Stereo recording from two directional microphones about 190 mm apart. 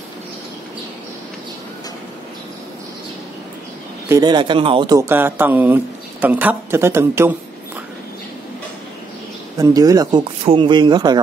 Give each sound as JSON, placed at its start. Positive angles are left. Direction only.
{"t": 4.1, "sound": "speech", "side_deg": -20}
{"t": 9.6, "sound": "speech", "side_deg": -20}